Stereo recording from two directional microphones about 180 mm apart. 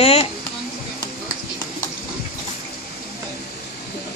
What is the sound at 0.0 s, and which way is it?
Speech, 35° left (ahead or behind).